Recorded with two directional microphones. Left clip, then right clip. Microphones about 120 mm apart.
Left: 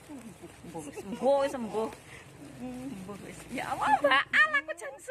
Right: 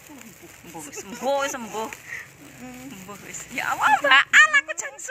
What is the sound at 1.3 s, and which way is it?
Speech, 20° left (ahead or behind).